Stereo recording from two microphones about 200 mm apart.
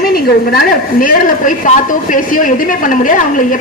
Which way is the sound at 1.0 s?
40° left (ahead or behind).